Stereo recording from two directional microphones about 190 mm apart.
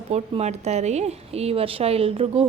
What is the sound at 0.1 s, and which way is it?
A woman's voice, 35° right (ahead or behind).